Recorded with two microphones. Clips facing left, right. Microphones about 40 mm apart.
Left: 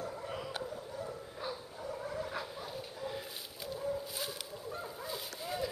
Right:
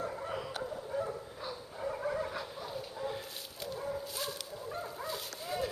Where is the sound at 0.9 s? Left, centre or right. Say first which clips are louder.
Right 9 dB; right.